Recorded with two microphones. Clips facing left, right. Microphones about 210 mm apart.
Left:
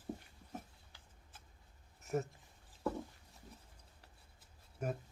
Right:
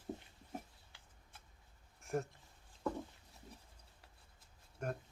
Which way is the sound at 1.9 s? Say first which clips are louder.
Left 1 dB; 5° left (ahead or behind).